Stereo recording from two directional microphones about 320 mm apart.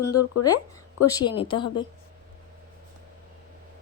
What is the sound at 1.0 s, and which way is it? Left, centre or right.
Speech, centre.